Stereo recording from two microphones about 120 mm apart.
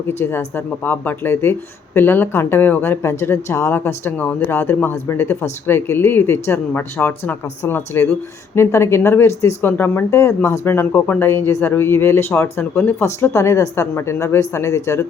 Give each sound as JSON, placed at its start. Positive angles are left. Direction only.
{"t": 0.1, "sound": "speech", "side_deg": 20}